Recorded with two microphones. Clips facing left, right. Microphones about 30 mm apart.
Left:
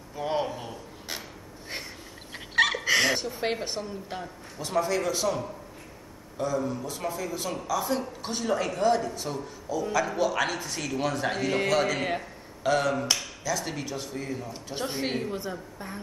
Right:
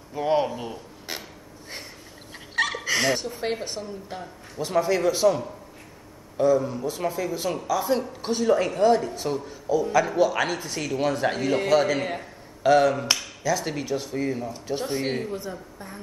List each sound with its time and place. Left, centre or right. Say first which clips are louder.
0.1 s a sound: right 6 dB; centre
2.3 s fowl: left 2 dB; centre
3.3 s a woman's voice: right 1 dB; centre
4.6 s speech: right 4 dB; centre
11.4 s speech: right 4 dB; centre
14.7 s a woman's voice: right 3 dB; centre